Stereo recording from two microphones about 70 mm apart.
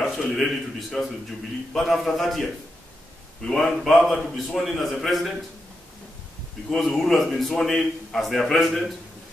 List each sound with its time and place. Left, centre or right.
0.0 s a man's voice: centre
3.4 s a man's voice: centre
6.7 s a man's voice: centre